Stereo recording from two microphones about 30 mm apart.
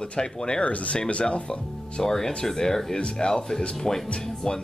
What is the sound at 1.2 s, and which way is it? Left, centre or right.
Speech, left.